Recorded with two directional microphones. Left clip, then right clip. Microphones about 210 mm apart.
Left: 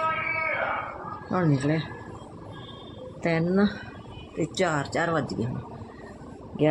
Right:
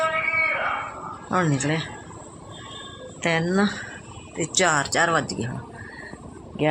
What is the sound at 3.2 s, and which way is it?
Speech, centre (ahead or behind).